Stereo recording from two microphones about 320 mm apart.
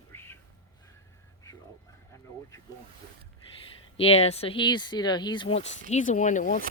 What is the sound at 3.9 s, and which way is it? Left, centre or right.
Speech, centre.